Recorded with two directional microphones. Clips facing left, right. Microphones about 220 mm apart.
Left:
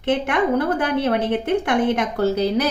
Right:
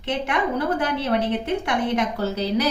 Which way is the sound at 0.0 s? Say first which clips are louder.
Left 5 dB; 55° left (ahead or behind).